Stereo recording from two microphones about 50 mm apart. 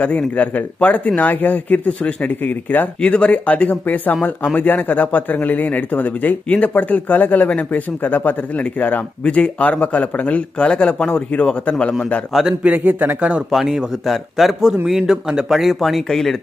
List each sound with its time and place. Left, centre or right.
0.4 s speech: left; by 11.5 s centre
12.3 s speech: centre
12.6 s speech: right
13.5 s a man's voice: centre
15.5 s speech: centre